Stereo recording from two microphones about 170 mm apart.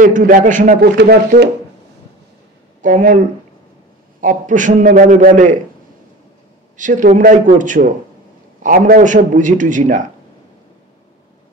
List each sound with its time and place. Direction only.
0.0 s a man's voice: 50° right (ahead or behind)
0.9 s speech: 70° right (ahead or behind)
2.8 s a man's voice: 50° right (ahead or behind)
4.2 s a man's voice: 50° right (ahead or behind)
6.8 s a man's voice: 50° right (ahead or behind)